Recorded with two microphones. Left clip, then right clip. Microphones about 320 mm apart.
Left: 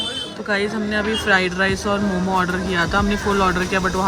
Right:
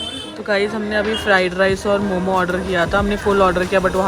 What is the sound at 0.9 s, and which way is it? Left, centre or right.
Speech, centre.